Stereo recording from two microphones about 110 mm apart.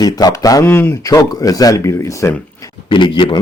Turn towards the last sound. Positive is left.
turn(degrees=45)  # may be behind; listen again after turning